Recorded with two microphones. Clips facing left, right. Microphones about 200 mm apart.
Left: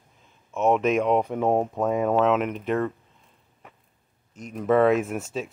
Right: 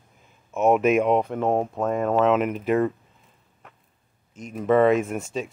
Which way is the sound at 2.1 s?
Centre (ahead or behind).